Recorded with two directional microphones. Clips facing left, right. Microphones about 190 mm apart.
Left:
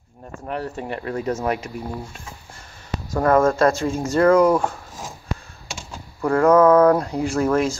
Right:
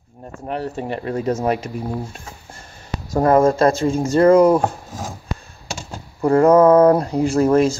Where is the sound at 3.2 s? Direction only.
25° right (ahead or behind).